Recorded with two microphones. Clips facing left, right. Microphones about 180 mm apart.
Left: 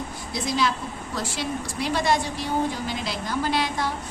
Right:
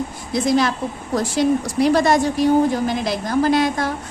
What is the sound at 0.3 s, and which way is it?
A woman's voice, 50° right (ahead or behind).